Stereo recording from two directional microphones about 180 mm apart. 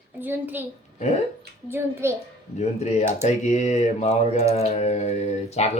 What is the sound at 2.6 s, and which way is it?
Speech, 40° left (ahead or behind).